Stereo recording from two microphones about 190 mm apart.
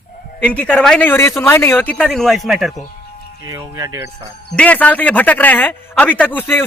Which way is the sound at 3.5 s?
15° right (ahead or behind).